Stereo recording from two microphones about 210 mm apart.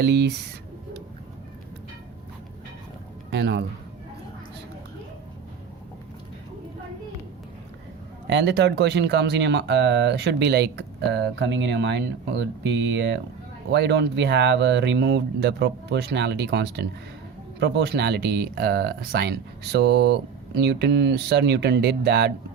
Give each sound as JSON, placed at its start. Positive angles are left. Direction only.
{"t": 0.0, "sound": "speech", "side_deg": -55}
{"t": 3.2, "sound": "speech", "side_deg": -55}
{"t": 8.3, "sound": "speech", "side_deg": -55}